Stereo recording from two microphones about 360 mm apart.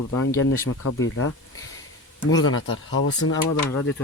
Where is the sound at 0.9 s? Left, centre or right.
Left.